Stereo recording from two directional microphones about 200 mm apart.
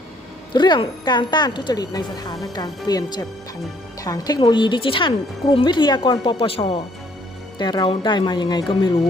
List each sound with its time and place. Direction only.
0.5 s speech: 20° left (ahead or behind)